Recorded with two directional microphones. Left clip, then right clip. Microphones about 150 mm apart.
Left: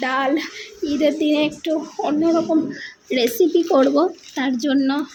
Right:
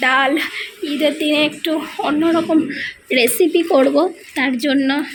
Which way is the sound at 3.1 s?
20° left (ahead or behind).